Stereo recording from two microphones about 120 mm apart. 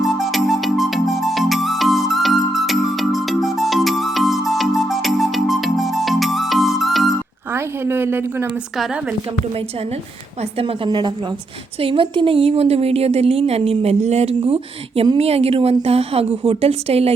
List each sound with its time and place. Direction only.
0.0 s music: centre (ahead or behind)
7.5 s a woman's voice: 20° right (ahead or behind)
10.8 s a woman's voice: 35° right (ahead or behind)
11.8 s speech: 50° right (ahead or behind)